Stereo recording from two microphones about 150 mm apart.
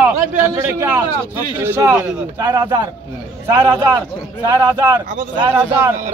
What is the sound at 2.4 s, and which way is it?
A man's voice, 25° right (ahead or behind).